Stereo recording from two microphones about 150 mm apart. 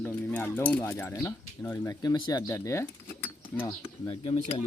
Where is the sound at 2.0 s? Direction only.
25° left (ahead or behind).